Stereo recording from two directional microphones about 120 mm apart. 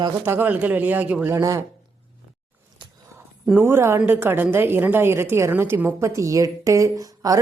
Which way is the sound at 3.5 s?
20° right (ahead or behind).